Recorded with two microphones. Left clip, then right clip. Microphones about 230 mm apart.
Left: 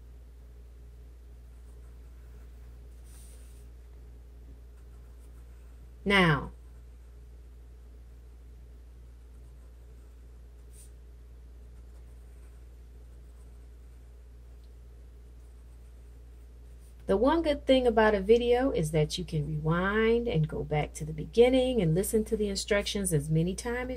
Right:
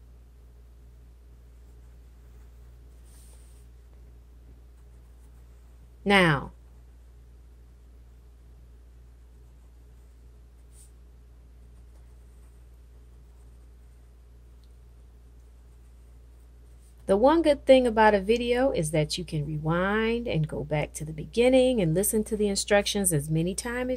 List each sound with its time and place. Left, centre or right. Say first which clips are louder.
6.0 s a woman's voice: right 3 dB; right
17.0 s a woman's voice: right 5 dB; right